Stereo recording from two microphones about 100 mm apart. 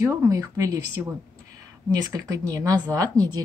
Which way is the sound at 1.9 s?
35° right (ahead or behind).